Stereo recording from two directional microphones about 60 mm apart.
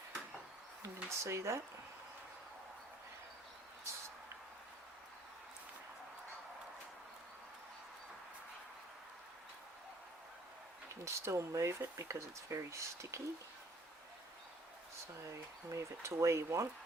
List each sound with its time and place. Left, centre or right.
1.2 s speech: right
11.0 s speech: right
15.7 s speech: right